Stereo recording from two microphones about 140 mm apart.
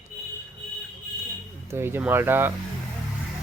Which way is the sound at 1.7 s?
15° right (ahead or behind).